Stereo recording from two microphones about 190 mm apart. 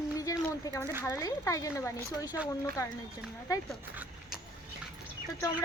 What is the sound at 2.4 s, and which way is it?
Speech, 5° right (ahead or behind).